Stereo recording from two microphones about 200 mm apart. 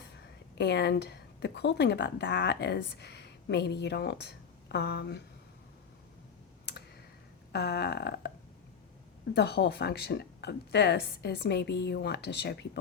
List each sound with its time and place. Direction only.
0.6 s speech: 55° left (ahead or behind)
7.5 s speech: 55° left (ahead or behind)
9.3 s speech: 55° left (ahead or behind)